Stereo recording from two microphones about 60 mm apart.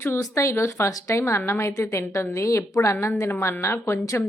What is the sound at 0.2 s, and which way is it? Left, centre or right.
A woman's voice, left.